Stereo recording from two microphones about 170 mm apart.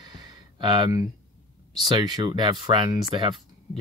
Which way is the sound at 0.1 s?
25° right (ahead or behind).